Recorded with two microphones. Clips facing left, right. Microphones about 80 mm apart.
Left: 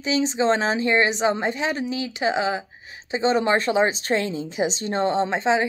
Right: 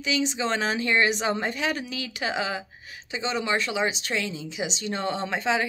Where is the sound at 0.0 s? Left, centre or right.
Left.